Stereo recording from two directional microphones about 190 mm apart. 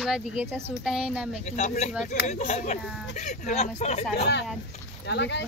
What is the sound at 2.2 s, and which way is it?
Speech, 35° left (ahead or behind).